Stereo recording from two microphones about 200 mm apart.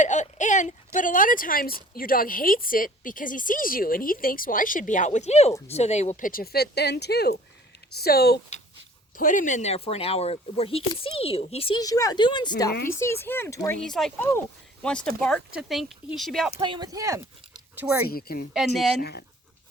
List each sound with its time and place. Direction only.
0.0 s a woman's voice: 35° left (ahead or behind); by 13.7 s 15° left (ahead or behind)
13.8 s speech: 5° left (ahead or behind)
16.6 s speech: 25° right (ahead or behind)
18.1 s a woman's voice: 50° left (ahead or behind)
18.5 s speech: centre (ahead or behind)